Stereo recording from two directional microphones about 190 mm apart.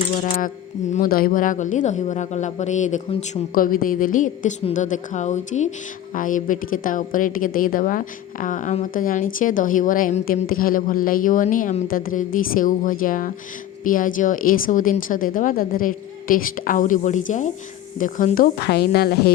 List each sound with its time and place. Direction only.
0.3 s a woman's voice: 45° left (ahead or behind)